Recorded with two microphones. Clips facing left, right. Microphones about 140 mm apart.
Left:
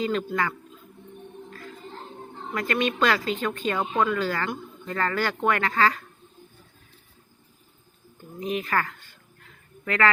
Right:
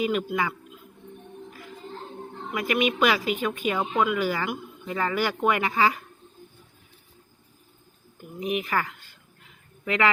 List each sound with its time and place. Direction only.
0.0 s speech: 15° right (ahead or behind)
1.5 s music: 15° right (ahead or behind)
2.5 s speech: 10° right (ahead or behind)
8.4 s speech: 15° right (ahead or behind)
9.4 s a sound: 15° right (ahead or behind)